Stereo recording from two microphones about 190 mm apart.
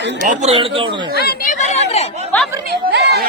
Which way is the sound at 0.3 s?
35° right (ahead or behind).